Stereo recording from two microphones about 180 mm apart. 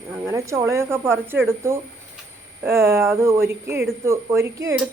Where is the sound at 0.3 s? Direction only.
15° right (ahead or behind).